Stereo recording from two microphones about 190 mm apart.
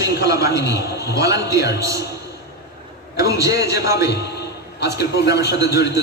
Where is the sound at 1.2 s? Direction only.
15° right (ahead or behind).